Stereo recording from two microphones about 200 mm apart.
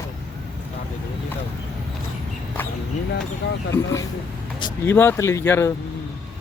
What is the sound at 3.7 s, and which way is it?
Speech, 10° left (ahead or behind).